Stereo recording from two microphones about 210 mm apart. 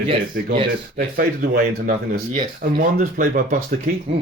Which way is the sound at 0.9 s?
45° right (ahead or behind).